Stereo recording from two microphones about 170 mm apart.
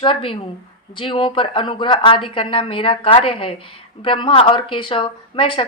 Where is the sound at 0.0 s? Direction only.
30° left (ahead or behind).